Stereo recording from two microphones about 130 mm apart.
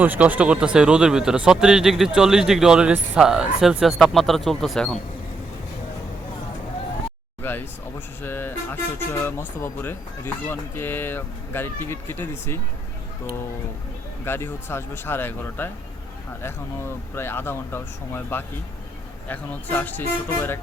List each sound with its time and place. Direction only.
0.0 s speech: 15° right (ahead or behind); by 4.9 s centre (ahead or behind)
7.4 s a sound: 15° left (ahead or behind)
8.2 s speech: 15° left (ahead or behind)
14.3 s speech: 20° left (ahead or behind)